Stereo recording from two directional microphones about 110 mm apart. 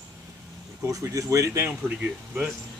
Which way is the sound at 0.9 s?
30° right (ahead or behind).